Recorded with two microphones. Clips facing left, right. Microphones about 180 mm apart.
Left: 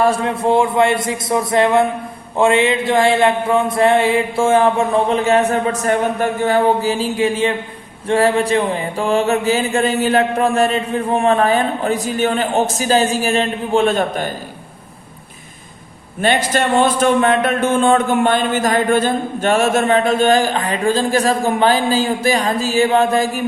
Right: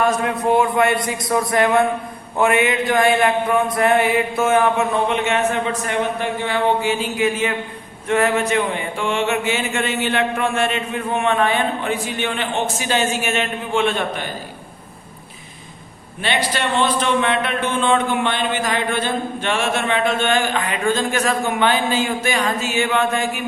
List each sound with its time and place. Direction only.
0.0 s mantra: 30° left (ahead or behind)
8.0 s a sound: 30° left (ahead or behind)
16.2 s speech: 45° left (ahead or behind)